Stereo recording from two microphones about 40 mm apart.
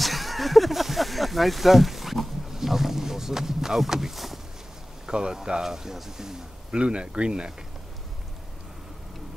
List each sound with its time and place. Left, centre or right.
0.0 s a sound: centre
5.0 s speech: centre
6.8 s speech: right